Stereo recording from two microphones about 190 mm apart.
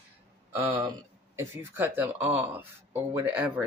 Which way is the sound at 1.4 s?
10° right (ahead or behind).